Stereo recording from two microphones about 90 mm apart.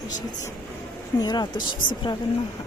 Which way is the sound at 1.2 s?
50° left (ahead or behind).